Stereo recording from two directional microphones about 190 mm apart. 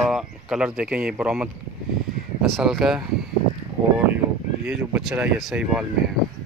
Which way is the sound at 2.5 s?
Centre (ahead or behind).